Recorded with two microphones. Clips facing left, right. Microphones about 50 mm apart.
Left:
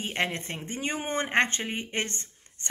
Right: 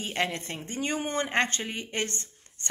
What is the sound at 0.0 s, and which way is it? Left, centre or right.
Speech, centre.